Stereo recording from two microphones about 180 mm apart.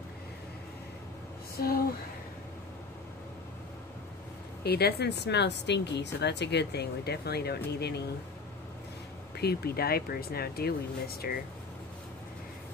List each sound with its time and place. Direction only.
1.6 s speech: 55° left (ahead or behind)
4.6 s speech: 60° left (ahead or behind)
9.4 s speech: 60° left (ahead or behind)